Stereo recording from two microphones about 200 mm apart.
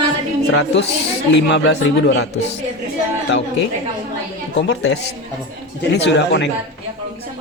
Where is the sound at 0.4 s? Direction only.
65° left (ahead or behind).